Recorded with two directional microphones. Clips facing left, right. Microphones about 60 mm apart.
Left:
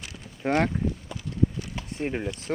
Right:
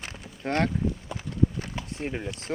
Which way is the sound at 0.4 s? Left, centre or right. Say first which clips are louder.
Left 2 dB; centre.